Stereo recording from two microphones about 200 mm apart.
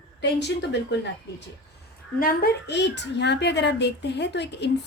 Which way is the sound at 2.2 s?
50° left (ahead or behind).